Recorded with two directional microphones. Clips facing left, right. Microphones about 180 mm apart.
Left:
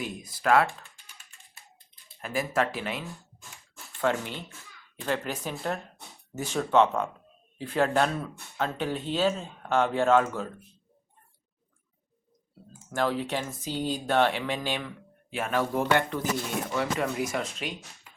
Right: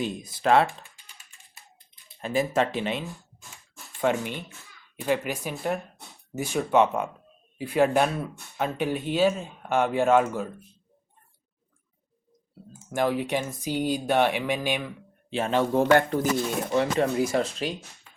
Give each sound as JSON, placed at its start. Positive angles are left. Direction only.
{"t": 0.0, "sound": "speech", "side_deg": -25}
{"t": 2.2, "sound": "speech", "side_deg": -25}
{"t": 4.0, "sound": "speech", "side_deg": -15}
{"t": 12.9, "sound": "speech", "side_deg": -15}
{"t": 15.3, "sound": "speech", "side_deg": -25}
{"t": 15.9, "sound": "speech", "side_deg": -40}
{"t": 16.7, "sound": "speech", "side_deg": -25}